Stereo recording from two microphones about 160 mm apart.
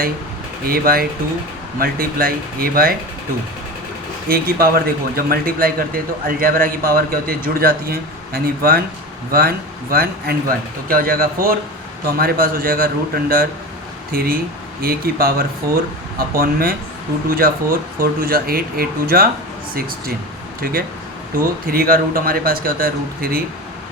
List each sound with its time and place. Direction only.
0.6 s speech: 65° right (ahead or behind)
4.3 s a man's voice: 70° right (ahead or behind)
9.9 s a man's voice: 65° right (ahead or behind)
21.3 s speech: 65° right (ahead or behind)